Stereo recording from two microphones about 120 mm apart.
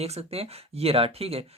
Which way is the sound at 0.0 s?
55° right (ahead or behind).